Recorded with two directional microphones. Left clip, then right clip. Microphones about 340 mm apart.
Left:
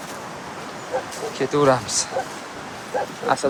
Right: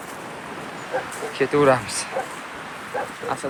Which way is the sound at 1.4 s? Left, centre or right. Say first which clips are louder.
Right 1 dB; centre.